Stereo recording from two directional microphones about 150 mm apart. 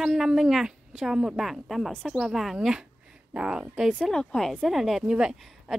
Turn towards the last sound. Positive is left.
turn(degrees=-5)  # may be behind; listen again after turning